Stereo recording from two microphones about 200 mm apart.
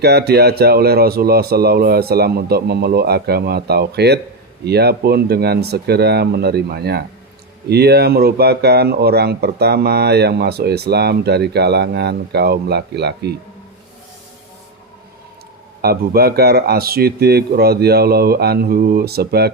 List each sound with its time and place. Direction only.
0.0 s speech: 55° right (ahead or behind)
15.8 s speech: 50° right (ahead or behind)